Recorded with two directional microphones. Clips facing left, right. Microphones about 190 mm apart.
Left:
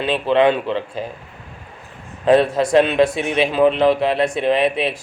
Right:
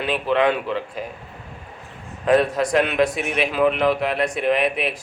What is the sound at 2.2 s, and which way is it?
A man's voice, 30° left (ahead or behind).